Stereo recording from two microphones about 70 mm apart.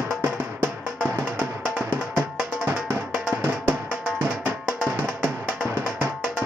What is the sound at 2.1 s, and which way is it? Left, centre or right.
Music, right.